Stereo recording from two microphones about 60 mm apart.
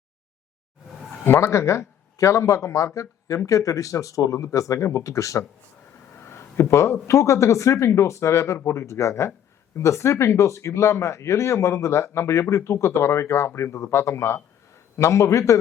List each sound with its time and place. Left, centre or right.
1.2 s speech: left
6.1 s speech: left